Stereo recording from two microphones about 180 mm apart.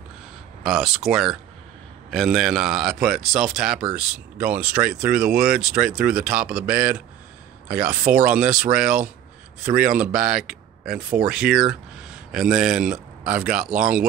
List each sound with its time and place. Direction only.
0.7 s speech: centre (ahead or behind)